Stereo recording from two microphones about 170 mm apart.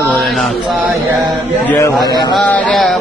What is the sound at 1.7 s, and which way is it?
Speech, 15° left (ahead or behind).